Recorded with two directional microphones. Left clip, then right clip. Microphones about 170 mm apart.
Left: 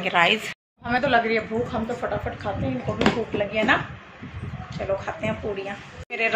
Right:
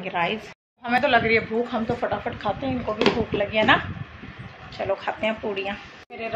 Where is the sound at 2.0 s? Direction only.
40° right (ahead or behind).